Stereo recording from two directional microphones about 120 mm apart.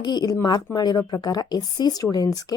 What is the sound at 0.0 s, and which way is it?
Speech, 35° left (ahead or behind).